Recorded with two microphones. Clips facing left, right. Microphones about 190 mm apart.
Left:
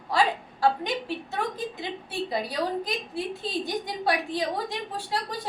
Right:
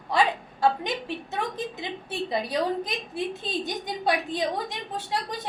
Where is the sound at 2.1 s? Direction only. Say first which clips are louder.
Right 3 dB; 20° right (ahead or behind).